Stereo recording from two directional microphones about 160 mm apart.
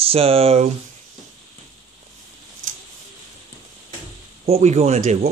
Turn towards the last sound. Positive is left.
turn(degrees=-45)  # may be behind; listen again after turning